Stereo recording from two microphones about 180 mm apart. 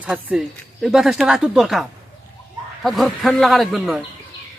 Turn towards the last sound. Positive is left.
turn(degrees=0)  # may be behind; listen again after turning